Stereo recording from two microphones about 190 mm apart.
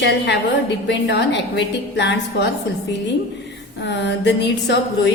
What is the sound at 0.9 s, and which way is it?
A woman's voice, 65° left (ahead or behind).